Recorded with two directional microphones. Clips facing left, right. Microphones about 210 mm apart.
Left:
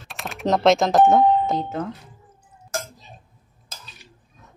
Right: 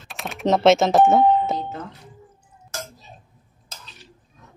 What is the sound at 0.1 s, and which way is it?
Speech, centre (ahead or behind).